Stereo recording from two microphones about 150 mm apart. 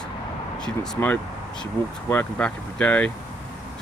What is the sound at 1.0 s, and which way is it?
Speech, 15° left (ahead or behind).